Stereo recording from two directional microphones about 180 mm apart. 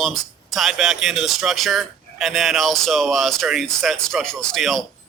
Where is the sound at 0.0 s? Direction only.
Centre (ahead or behind).